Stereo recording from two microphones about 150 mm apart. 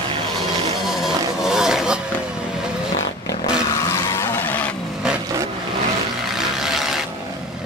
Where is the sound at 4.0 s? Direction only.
20° left (ahead or behind).